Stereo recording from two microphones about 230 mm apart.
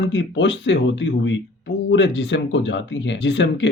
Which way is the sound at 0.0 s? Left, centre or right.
Left.